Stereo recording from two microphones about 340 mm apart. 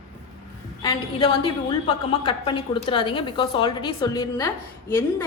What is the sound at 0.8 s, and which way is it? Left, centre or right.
A woman's voice, centre.